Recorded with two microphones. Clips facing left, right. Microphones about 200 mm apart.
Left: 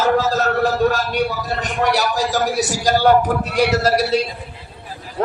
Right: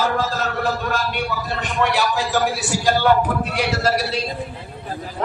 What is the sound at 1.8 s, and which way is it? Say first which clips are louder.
A man's voice: left 1 dB; 40° left (ahead or behind).